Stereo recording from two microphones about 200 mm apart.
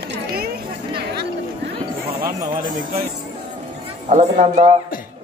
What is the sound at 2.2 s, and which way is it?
Music, 15° right (ahead or behind).